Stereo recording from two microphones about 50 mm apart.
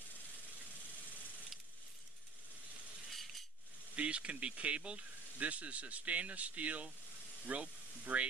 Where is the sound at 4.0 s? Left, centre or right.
Right.